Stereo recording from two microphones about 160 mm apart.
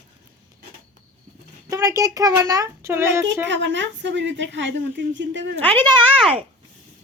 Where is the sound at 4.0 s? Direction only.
90° right.